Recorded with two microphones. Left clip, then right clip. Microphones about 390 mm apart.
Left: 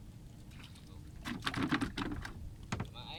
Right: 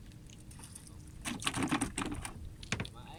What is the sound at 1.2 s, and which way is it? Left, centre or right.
Typing, centre.